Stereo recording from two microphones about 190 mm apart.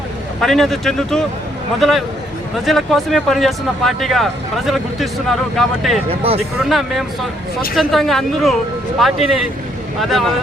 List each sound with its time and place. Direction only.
0.4 s speech: centre (ahead or behind)
6.1 s speech: 30° right (ahead or behind)
6.7 s speech: centre (ahead or behind)